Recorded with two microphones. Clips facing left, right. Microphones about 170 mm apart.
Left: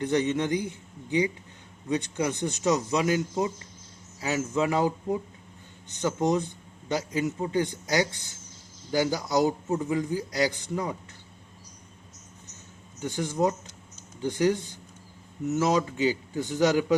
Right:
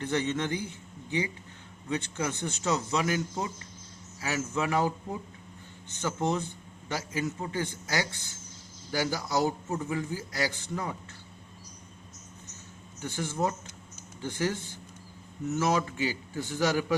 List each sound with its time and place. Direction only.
0.0 s speech: 15° left (ahead or behind)
1.9 s a man's voice: 15° left (ahead or behind)
13.0 s a man's voice: 15° left (ahead or behind)